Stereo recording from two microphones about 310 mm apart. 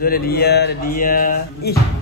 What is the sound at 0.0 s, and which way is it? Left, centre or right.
Speech, left.